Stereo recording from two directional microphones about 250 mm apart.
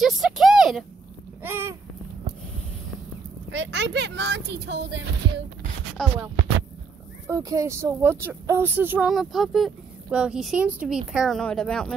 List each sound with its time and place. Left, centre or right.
0.0 s a sound: centre
3.5 s speech: right
6.0 s speech: centre
7.2 s speech: centre